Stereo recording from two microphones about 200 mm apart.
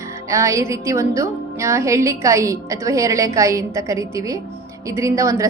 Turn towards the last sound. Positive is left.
turn(degrees=-15)  # may be behind; listen again after turning